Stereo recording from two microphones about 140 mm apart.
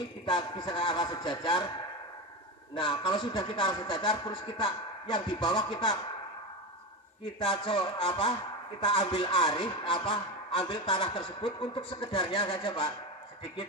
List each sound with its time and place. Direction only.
0.3 s speech: 30° left (ahead or behind)
2.7 s speech: 35° left (ahead or behind)
7.3 s speech: 35° left (ahead or behind)